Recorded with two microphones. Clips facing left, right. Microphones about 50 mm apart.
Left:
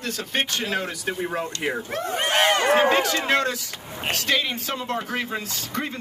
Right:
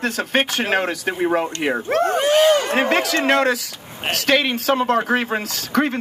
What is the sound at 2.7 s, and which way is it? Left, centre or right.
Speech, right.